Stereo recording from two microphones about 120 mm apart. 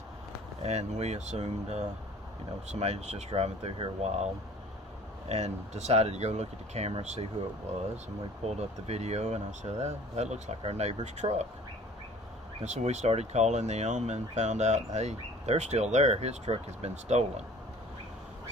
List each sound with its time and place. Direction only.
0.6 s speech: 65° right (ahead or behind); by 4.1 s 50° right (ahead or behind)
5.3 s speech: 65° right (ahead or behind)
8.4 s speech: 65° right (ahead or behind)
10.6 s speech: 60° right (ahead or behind)
11.0 s speech: 75° right (ahead or behind)
12.6 s speech: 70° right (ahead or behind)